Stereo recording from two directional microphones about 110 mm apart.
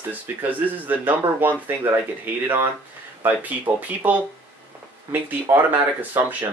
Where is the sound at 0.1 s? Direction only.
15° right (ahead or behind).